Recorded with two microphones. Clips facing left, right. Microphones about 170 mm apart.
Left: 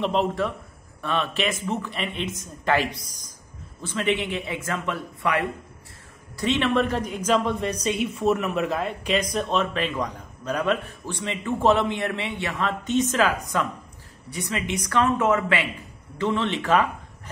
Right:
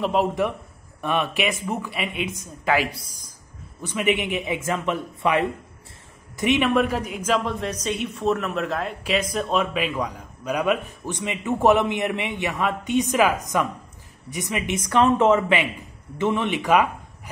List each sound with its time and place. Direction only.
0.0 s a woman's voice: 5° right (ahead or behind)